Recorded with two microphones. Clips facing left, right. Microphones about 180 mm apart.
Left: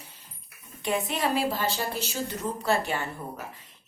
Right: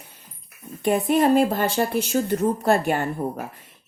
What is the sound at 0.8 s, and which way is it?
A woman's voice, 50° right (ahead or behind).